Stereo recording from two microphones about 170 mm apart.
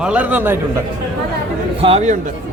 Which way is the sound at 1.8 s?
35° right (ahead or behind).